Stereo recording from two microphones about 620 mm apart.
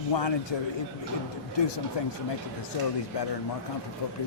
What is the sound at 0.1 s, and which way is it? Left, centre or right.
Speech, left.